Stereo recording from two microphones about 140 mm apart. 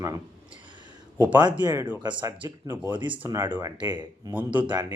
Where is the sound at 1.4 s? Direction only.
25° right (ahead or behind).